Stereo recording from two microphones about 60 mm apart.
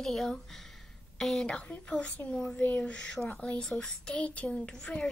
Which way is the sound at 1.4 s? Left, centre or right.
Centre.